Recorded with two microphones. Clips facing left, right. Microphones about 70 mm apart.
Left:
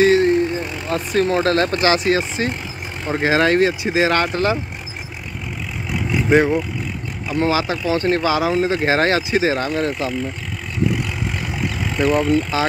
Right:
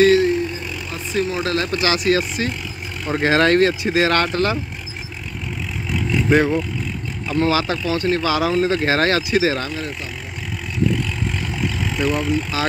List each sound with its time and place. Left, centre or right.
0.2 s vehicle: left
0.8 s speech: left
3.1 s speech: centre
5.9 s vehicle: centre
7.2 s speech: left
11.5 s vehicle: centre